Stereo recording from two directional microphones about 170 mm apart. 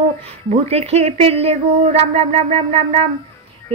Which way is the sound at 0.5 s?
40° right (ahead or behind).